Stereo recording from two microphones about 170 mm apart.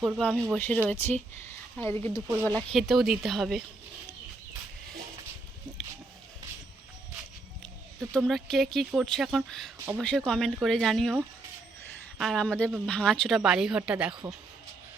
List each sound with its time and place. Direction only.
0.2 s speech: 10° left (ahead or behind)
8.1 s speech: centre (ahead or behind)